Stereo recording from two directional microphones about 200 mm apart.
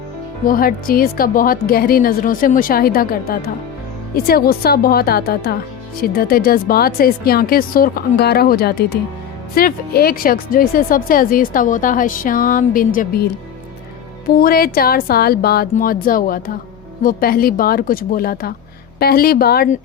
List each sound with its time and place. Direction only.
0.4 s speech: 45° left (ahead or behind)